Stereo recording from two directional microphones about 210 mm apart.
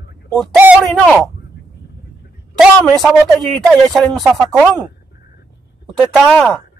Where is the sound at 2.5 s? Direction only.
Centre (ahead or behind).